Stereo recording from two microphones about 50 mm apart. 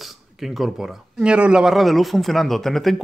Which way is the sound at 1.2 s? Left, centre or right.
Centre.